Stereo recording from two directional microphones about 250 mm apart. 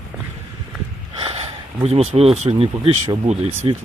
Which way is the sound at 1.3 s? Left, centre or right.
Right.